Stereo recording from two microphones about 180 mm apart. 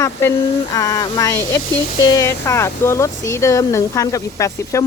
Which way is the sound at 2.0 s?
20° left (ahead or behind).